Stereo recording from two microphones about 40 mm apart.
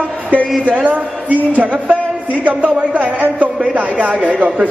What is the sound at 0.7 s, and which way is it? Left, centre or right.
A man's voice, right.